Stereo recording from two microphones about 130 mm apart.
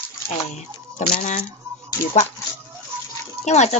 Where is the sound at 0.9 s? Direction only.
70° left (ahead or behind).